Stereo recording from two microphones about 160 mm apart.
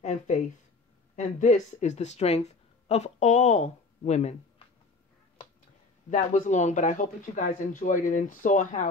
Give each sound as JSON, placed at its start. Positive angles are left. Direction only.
{"t": 0.0, "sound": "a sound", "side_deg": 50}
{"t": 1.1, "sound": "speech", "side_deg": 45}
{"t": 6.0, "sound": "speech", "side_deg": 50}